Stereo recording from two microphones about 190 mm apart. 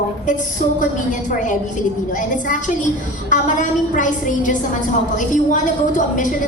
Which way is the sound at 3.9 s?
40° left (ahead or behind).